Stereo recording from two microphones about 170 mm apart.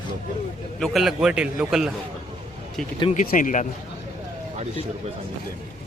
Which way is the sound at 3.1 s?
50° left (ahead or behind).